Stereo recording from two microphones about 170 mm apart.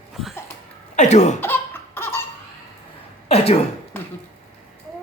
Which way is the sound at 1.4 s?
15° left (ahead or behind).